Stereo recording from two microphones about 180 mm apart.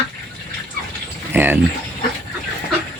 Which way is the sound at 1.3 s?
10° right (ahead or behind).